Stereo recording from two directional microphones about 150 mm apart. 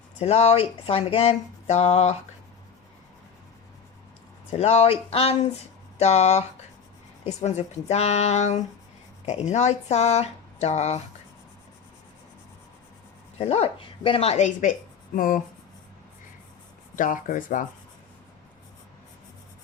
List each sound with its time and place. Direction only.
0.2 s speech: 45° left (ahead or behind)
4.5 s speech: 45° left (ahead or behind)
13.4 s speech: 45° left (ahead or behind); by 15.4 s 65° left (ahead or behind)
16.9 s speech: 60° left (ahead or behind)